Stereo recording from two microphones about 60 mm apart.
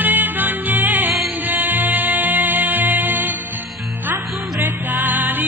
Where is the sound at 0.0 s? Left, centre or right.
Right.